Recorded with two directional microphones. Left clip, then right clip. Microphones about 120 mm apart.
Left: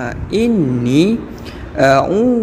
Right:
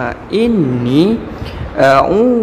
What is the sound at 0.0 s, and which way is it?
Speech, 30° left (ahead or behind).